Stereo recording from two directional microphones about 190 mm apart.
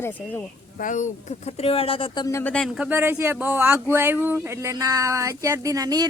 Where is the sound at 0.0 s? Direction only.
10° left (ahead or behind).